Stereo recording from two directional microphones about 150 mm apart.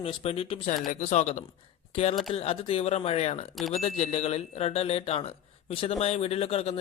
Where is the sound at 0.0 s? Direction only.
40° left (ahead or behind).